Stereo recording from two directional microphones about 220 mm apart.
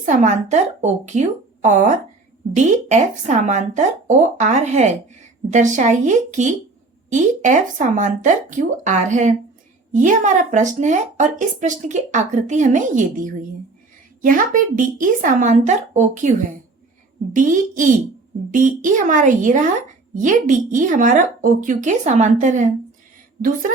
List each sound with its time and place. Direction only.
0.0 s speech: 35° right (ahead or behind)
17.3 s speech: 35° right (ahead or behind)